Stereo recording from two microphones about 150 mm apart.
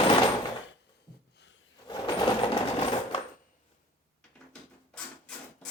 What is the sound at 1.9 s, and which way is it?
Coin, 30° left (ahead or behind).